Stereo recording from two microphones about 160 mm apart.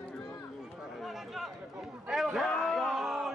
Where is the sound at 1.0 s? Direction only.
Centre (ahead or behind).